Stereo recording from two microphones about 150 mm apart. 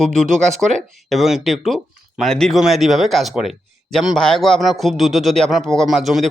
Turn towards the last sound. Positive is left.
turn(degrees=0)  # may be behind; listen again after turning